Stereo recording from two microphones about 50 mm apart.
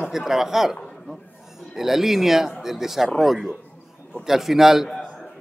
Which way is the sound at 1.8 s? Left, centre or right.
Centre.